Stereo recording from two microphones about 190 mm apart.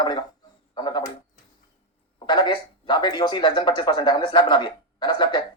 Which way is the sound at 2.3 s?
25° left (ahead or behind).